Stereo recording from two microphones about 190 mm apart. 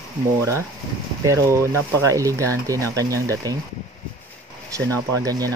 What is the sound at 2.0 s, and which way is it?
Speech, 15° right (ahead or behind).